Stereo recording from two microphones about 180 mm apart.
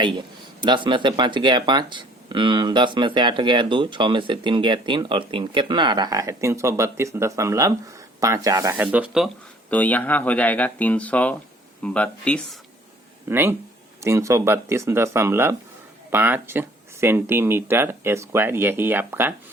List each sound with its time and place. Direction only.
0.0 s speech: 25° right (ahead or behind); by 12.5 s 5° left (ahead or behind)
13.2 s speech: 10° right (ahead or behind)